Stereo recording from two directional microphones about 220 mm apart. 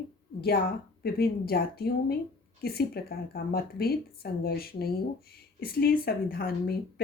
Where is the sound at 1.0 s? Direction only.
45° left (ahead or behind).